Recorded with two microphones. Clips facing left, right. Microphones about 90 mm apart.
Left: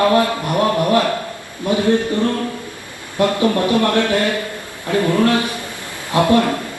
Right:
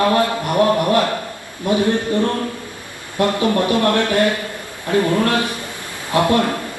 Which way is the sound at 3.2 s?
20° left (ahead or behind).